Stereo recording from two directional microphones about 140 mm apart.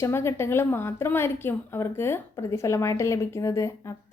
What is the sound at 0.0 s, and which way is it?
A woman's voice, 20° left (ahead or behind).